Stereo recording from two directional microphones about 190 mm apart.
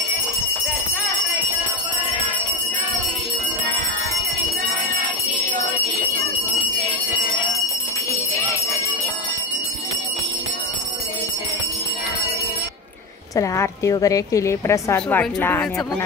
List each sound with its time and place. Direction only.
13.4 s a woman's voice: 15° left (ahead or behind)